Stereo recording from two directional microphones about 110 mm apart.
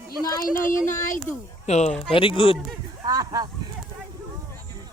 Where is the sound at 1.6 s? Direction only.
90° left.